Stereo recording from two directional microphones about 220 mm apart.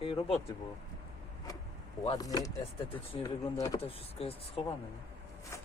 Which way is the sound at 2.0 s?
20° left (ahead or behind).